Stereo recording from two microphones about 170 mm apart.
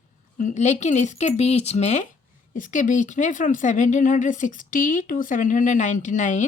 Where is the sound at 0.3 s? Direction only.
45° left (ahead or behind).